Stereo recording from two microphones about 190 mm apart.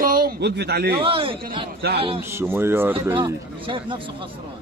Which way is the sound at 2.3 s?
10° right (ahead or behind).